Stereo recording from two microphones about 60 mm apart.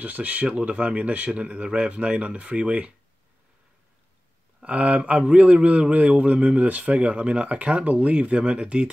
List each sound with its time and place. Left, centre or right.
0.0 s a man's voice: right
4.6 s a man's voice: right